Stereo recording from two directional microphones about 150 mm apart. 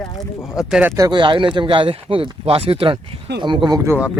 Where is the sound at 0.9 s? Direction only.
25° right (ahead or behind).